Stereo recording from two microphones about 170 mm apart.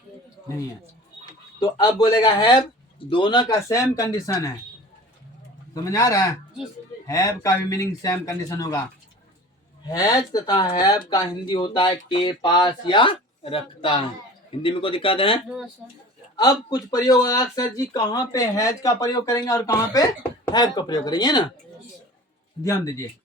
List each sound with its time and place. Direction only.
1.2 s a sound: 25° left (ahead or behind)
2.0 s speech: 25° left (ahead or behind)
5.7 s speech: 20° left (ahead or behind)
9.8 s speech: 20° left (ahead or behind)
15.4 s speech: 5° right (ahead or behind)
16.4 s speech: 20° left (ahead or behind)
22.6 s speech: 20° left (ahead or behind)